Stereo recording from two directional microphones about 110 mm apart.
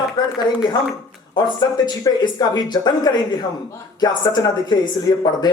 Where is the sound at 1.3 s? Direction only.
35° left (ahead or behind).